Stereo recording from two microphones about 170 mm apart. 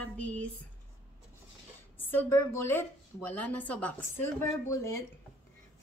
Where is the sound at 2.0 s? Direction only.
15° left (ahead or behind).